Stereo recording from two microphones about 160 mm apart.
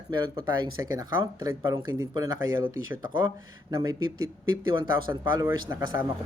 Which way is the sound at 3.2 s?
25° right (ahead or behind).